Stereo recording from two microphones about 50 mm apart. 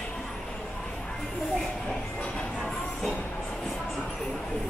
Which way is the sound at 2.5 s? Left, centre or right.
Centre.